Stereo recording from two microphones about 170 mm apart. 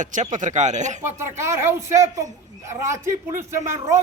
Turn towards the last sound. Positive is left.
turn(degrees=-15)  # may be behind; listen again after turning